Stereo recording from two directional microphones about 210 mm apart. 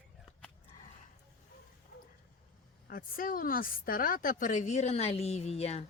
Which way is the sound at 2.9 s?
45° left (ahead or behind).